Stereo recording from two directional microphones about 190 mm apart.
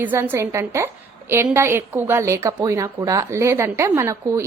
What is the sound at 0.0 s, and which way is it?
A woman's voice, 10° right (ahead or behind).